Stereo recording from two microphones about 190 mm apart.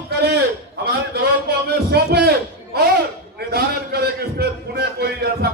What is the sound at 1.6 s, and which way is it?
Music, 60° right (ahead or behind).